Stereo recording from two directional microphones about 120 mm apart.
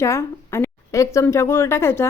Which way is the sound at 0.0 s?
20° left (ahead or behind).